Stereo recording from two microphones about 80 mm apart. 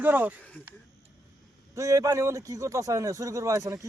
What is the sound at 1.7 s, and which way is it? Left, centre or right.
Speech, right.